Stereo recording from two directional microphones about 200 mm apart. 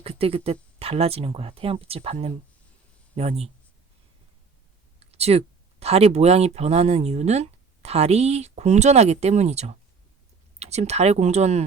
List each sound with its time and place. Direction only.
0.0 s speech: 30° right (ahead or behind)
4.9 s speech: 30° right (ahead or behind)